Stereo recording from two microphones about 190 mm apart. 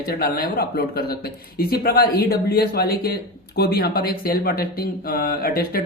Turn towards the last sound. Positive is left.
turn(degrees=50)  # may be behind; listen again after turning